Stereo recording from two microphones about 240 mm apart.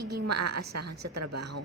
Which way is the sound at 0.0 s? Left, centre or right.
Right.